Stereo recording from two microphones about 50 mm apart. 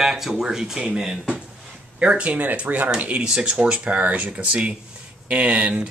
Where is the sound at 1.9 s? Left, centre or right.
Right.